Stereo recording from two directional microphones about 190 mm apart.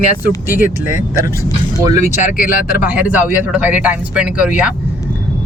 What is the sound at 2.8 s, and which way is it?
Speech, 10° right (ahead or behind).